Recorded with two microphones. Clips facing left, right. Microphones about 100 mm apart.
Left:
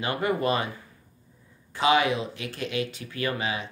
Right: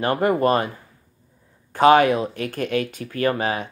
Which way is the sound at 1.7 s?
50° right (ahead or behind).